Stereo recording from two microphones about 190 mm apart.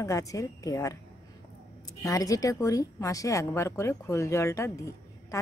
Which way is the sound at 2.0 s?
20° left (ahead or behind).